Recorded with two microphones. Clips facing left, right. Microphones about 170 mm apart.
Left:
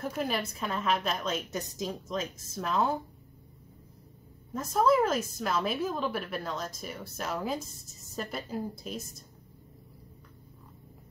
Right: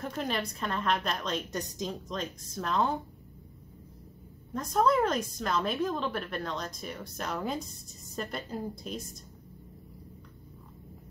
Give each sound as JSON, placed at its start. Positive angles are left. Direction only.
{"t": 0.0, "sound": "a woman's voice", "side_deg": 5}
{"t": 4.6, "sound": "a woman's voice", "side_deg": 5}